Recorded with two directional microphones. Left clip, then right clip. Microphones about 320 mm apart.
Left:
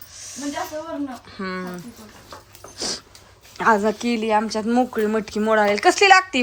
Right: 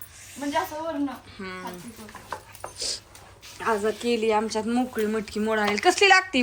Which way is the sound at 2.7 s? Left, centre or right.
Centre.